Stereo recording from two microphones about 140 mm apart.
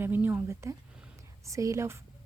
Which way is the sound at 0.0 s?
15° right (ahead or behind).